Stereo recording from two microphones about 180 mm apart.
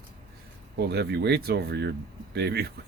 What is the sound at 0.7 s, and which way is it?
Speech, 65° right (ahead or behind).